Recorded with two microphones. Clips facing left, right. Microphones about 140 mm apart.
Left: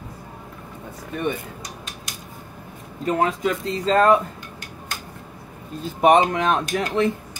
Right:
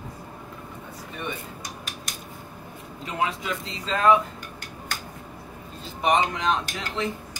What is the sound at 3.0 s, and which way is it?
Speech, 45° left (ahead or behind).